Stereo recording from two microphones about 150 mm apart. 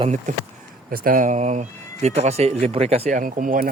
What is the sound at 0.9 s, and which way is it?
Speech, 70° right (ahead or behind).